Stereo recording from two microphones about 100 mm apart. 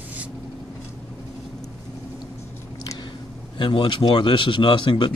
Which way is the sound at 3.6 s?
55° left (ahead or behind).